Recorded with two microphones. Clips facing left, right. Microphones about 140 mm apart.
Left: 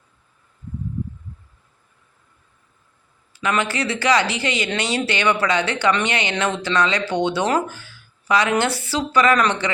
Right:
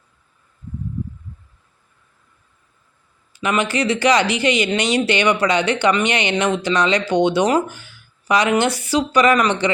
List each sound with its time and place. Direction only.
3.4 s speech: 20° right (ahead or behind)